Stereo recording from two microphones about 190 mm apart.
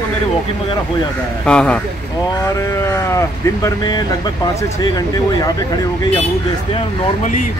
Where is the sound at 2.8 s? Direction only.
15° left (ahead or behind).